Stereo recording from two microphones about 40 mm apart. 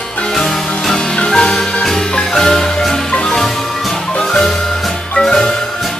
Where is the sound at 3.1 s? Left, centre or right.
Centre.